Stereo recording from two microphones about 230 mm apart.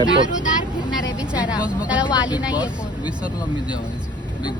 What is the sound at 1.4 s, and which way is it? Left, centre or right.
Speech, centre.